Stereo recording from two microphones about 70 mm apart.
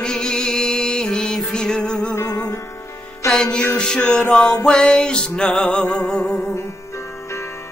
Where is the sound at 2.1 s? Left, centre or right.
Left.